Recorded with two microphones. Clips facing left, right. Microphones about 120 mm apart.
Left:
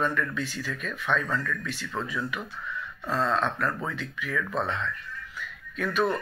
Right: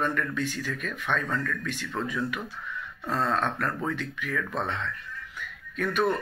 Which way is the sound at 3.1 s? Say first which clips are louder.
Left 1 dB; 45° right (ahead or behind).